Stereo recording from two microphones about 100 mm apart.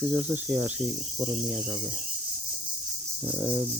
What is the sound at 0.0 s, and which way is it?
Speech, 20° right (ahead or behind).